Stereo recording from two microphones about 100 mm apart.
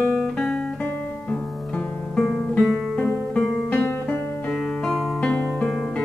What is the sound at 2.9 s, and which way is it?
Music, 10° left (ahead or behind).